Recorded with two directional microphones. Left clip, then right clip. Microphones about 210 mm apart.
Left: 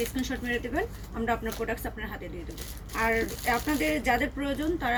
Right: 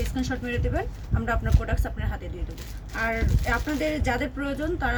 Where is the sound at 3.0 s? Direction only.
20° right (ahead or behind).